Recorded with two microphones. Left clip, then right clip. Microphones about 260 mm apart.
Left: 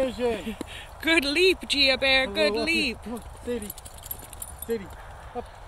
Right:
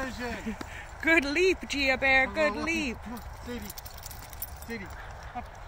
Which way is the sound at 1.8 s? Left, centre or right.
Centre.